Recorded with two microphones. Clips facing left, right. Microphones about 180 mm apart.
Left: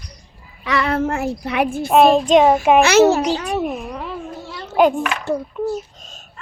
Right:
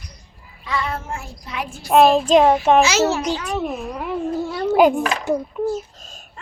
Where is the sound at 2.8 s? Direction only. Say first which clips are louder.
Left 5 dB; 60° left (ahead or behind).